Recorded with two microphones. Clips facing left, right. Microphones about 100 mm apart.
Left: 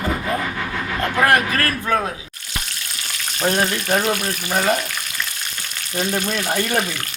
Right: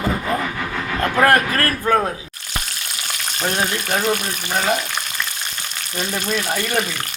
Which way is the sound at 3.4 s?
Centre (ahead or behind).